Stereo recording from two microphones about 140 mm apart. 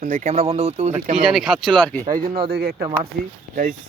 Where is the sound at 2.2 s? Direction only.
90° right.